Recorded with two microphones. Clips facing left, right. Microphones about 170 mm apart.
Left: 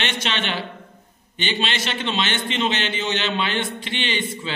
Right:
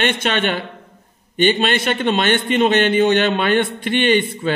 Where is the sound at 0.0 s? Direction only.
55° right (ahead or behind).